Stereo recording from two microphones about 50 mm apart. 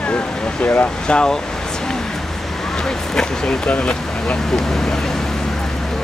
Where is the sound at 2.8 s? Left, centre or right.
Centre.